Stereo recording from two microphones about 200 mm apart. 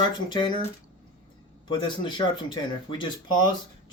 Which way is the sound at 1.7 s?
25° left (ahead or behind).